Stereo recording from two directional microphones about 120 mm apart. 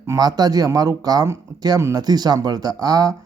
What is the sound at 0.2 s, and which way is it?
Speech, 35° right (ahead or behind).